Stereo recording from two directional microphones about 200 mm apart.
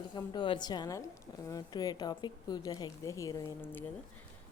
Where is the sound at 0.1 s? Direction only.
20° left (ahead or behind).